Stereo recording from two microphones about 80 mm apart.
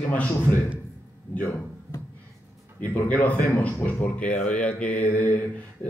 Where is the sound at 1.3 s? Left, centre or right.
Centre.